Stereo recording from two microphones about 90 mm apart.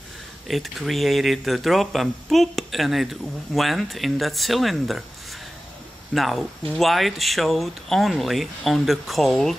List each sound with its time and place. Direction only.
0.5 s speech: centre (ahead or behind)
6.1 s speech: centre (ahead or behind)